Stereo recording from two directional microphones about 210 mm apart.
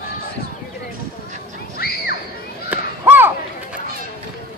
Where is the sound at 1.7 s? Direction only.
45° left (ahead or behind).